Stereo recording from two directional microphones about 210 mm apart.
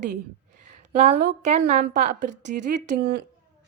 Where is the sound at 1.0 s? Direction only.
35° right (ahead or behind).